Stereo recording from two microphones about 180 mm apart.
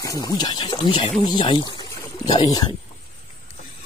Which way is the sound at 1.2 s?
25° left (ahead or behind).